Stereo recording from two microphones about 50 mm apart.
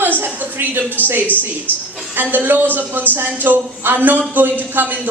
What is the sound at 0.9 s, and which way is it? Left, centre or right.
Speech, right.